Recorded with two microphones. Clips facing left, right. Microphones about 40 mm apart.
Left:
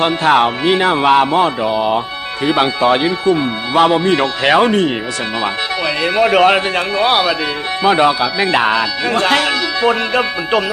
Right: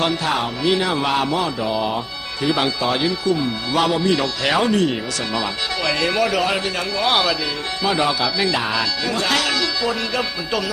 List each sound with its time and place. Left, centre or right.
0.3 s speech: left
1.7 s speech: left
5.8 s speech: centre
6.2 s speech: left
7.1 s speech: centre
7.9 s speech: left
8.5 s speech: left